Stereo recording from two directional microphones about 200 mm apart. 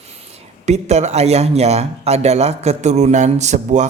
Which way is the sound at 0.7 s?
35° right (ahead or behind).